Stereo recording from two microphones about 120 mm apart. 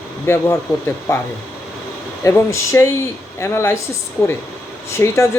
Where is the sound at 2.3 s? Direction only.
25° left (ahead or behind).